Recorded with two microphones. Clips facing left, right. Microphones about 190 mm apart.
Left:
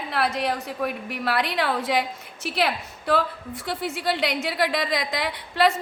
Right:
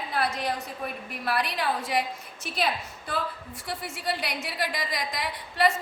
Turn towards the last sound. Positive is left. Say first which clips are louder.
# left 4 dB
turn(degrees=70)  # may be behind; listen again after turning